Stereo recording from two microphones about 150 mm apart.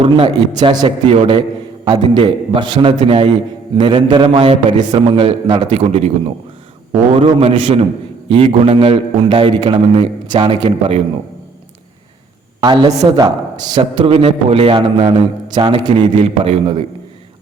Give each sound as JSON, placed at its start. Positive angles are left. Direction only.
{"t": 0.0, "sound": "a man's voice", "side_deg": -35}
{"t": 1.1, "sound": "a man's voice", "side_deg": -40}
{"t": 7.1, "sound": "a man's voice", "side_deg": -40}
{"t": 12.5, "sound": "a man's voice", "side_deg": -30}